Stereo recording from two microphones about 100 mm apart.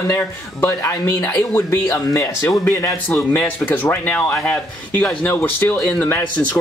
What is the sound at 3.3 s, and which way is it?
Speech, 20° left (ahead or behind).